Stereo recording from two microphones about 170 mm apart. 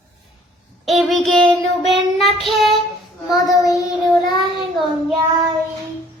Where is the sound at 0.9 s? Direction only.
Centre (ahead or behind).